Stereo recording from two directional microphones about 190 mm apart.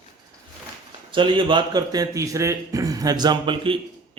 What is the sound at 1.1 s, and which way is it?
A man's voice, 25° right (ahead or behind).